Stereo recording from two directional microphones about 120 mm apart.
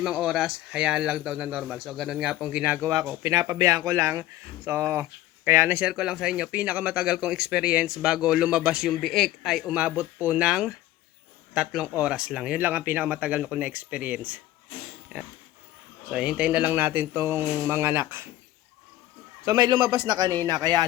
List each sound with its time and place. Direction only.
0.0 s speech: 5° right (ahead or behind)
3.2 s speech: 25° right (ahead or behind)
5.9 s speech: 5° right (ahead or behind)
16.0 s speech: 10° right (ahead or behind)
19.5 s a man's voice: 35° right (ahead or behind)